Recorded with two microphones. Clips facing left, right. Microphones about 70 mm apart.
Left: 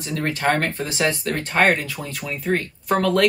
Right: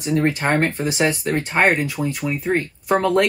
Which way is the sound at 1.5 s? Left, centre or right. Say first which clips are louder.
Even; centre.